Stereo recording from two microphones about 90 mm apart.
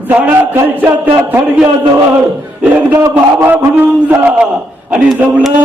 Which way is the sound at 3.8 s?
20° right (ahead or behind).